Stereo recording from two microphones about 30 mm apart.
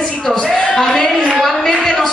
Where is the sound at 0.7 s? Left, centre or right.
Centre.